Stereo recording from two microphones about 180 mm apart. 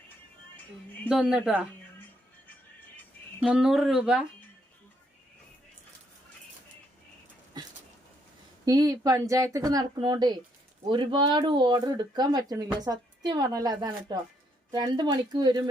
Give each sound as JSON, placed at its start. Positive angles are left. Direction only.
{"t": 1.3, "sound": "speech", "side_deg": -5}
{"t": 3.4, "sound": "speech", "side_deg": -5}
{"t": 8.6, "sound": "speech", "side_deg": -20}